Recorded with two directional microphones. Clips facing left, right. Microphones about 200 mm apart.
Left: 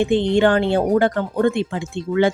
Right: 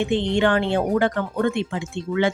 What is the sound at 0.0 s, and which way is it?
Speech, 35° left (ahead or behind).